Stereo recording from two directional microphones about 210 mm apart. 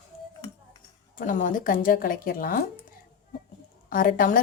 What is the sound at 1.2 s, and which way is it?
Speech, 40° left (ahead or behind).